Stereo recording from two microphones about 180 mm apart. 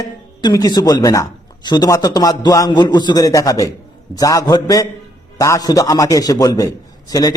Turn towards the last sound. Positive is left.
turn(degrees=20)  # may be behind; listen again after turning